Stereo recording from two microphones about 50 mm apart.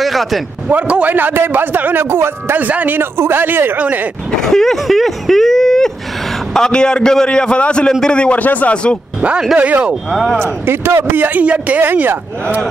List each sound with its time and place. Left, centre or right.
0.0 s a sound: centre
0.7 s a woman's voice: right
1.0 s speech: right
2.0 s speech: right
2.5 s speech: right
3.0 s a man's voice: right
3.7 s a woman's voice: right
4.4 s a man's voice: centre
8.4 s speech: left
9.6 s a woman's voice: right
10.4 s a man's voice: right
11.8 s speech: right